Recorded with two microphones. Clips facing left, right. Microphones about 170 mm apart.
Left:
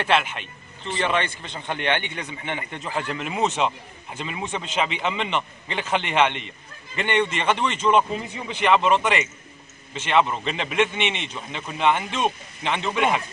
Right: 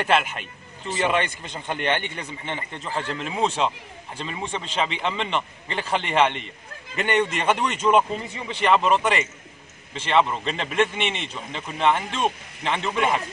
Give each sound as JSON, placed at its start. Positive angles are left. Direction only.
{"t": 0.0, "sound": "a man's voice", "side_deg": -5}
{"t": 3.0, "sound": "speech", "side_deg": -30}
{"t": 3.3, "sound": "speech", "side_deg": 5}